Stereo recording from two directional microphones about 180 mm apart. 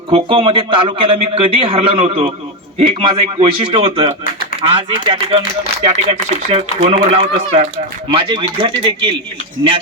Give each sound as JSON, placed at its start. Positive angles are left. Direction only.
{"t": 0.1, "sound": "a man's voice", "side_deg": -30}